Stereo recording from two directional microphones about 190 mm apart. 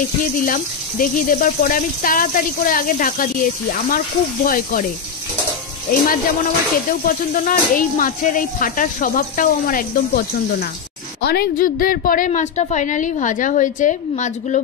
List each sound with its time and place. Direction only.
0.5 s speech: 45° left (ahead or behind)
4.5 s speech: 45° left (ahead or behind)
5.9 s a woman's voice: 45° left (ahead or behind)